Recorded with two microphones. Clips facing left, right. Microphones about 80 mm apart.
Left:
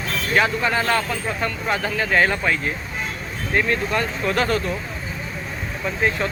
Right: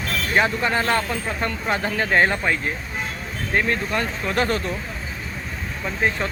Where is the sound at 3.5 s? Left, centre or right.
Right.